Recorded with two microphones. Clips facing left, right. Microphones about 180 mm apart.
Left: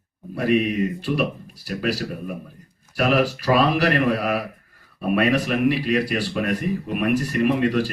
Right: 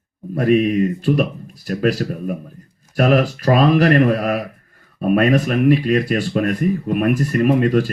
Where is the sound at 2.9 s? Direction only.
45° right (ahead or behind).